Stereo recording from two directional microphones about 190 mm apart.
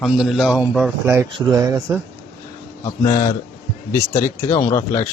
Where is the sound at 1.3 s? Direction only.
20° right (ahead or behind).